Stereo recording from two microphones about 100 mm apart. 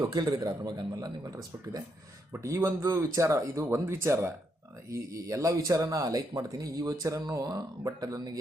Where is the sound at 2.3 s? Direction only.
30° right (ahead or behind).